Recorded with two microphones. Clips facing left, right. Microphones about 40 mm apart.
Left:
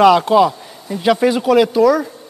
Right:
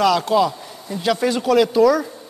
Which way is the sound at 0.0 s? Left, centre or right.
Left.